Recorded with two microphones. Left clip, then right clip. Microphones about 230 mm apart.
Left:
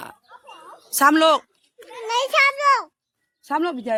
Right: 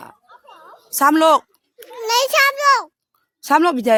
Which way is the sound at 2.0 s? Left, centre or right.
Right.